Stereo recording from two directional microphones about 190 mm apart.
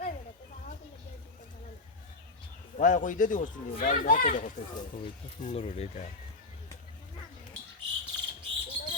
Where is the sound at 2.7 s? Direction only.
45° left (ahead or behind).